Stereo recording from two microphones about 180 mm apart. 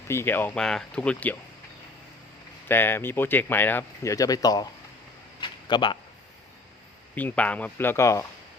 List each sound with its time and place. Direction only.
0.1 s speech: 15° left (ahead or behind)
2.6 s speech: 10° left (ahead or behind)
5.4 s a sound: 25° left (ahead or behind)
7.2 s speech: 10° left (ahead or behind)